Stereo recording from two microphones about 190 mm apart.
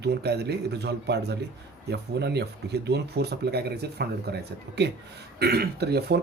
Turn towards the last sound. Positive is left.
turn(degrees=-60)  # may be behind; listen again after turning